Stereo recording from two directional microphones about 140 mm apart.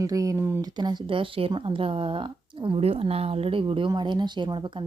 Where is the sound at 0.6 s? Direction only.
30° right (ahead or behind).